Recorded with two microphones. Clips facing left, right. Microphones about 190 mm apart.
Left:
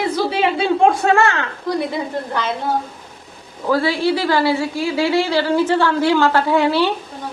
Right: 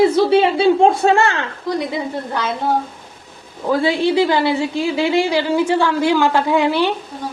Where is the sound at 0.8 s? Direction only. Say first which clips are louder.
Right 1 dB; 25° right (ahead or behind).